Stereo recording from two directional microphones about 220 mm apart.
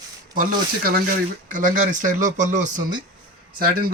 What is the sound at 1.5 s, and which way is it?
Speech, 35° right (ahead or behind).